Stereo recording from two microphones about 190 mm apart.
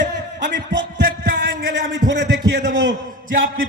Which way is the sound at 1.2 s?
50° right (ahead or behind).